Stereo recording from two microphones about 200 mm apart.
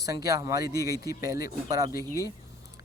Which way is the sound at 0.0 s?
15° right (ahead or behind).